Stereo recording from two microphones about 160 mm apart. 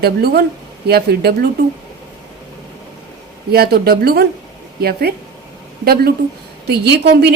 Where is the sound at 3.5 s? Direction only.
75° right (ahead or behind).